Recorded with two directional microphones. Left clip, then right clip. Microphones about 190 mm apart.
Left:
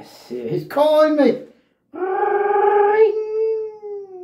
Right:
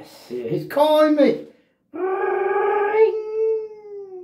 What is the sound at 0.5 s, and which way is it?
Speech, centre (ahead or behind).